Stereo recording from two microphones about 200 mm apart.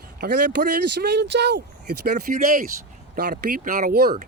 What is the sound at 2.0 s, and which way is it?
Speech, 45° right (ahead or behind).